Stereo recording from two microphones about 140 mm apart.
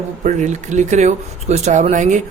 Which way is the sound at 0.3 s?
60° right (ahead or behind).